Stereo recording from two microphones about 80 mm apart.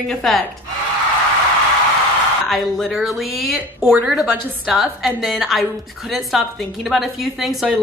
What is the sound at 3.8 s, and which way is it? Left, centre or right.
Speech, right.